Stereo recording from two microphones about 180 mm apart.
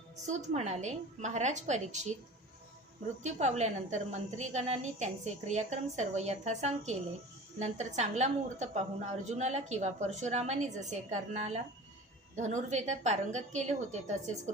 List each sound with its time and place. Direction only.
0.3 s a woman's voice: 40° right (ahead or behind)
3.2 s a woman's voice: 40° right (ahead or behind)